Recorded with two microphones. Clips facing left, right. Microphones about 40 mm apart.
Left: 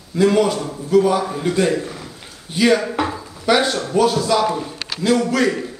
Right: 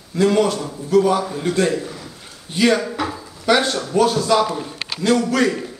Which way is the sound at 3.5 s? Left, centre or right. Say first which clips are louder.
Left 1 dB; centre.